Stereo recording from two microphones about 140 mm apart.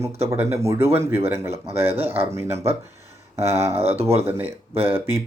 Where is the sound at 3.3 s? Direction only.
20° right (ahead or behind).